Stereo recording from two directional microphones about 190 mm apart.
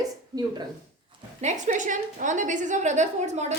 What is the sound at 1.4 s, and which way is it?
A woman's voice, 40° right (ahead or behind).